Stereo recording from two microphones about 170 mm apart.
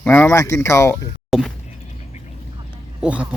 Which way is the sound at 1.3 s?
Centre (ahead or behind).